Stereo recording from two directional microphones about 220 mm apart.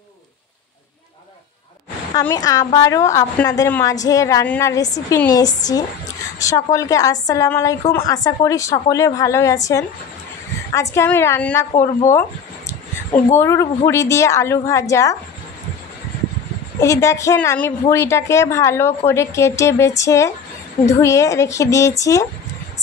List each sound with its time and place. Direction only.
2.1 s a woman's voice: 15° left (ahead or behind)
13.3 s a woman's voice: 10° left (ahead or behind)
16.8 s a woman's voice: 15° left (ahead or behind)